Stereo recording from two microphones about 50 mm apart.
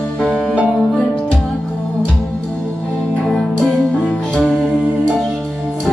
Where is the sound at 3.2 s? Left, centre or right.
Centre.